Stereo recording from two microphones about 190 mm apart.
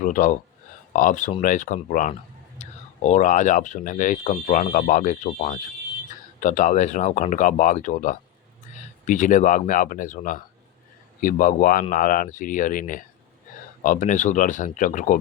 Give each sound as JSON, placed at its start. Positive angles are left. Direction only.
{"t": 0.0, "sound": "speech", "side_deg": 45}